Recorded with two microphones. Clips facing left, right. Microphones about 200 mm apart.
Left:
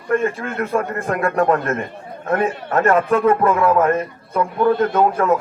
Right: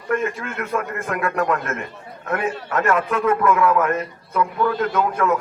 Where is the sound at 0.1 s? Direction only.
35° left (ahead or behind).